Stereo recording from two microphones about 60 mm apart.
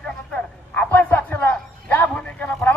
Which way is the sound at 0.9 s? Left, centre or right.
Left.